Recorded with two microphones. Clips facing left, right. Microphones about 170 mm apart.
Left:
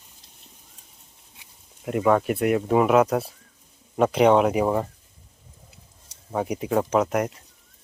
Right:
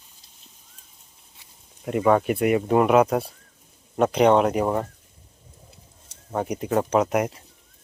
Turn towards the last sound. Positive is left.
turn(degrees=-5)  # may be behind; listen again after turning